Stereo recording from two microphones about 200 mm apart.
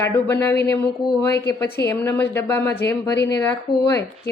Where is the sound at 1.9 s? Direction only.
10° left (ahead or behind).